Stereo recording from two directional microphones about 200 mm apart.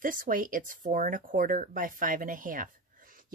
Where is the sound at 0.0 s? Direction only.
45° right (ahead or behind).